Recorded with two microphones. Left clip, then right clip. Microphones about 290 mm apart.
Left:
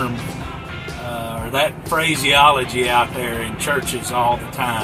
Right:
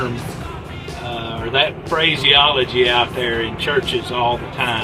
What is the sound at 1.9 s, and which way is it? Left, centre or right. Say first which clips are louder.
Speech: right 3 dB; centre.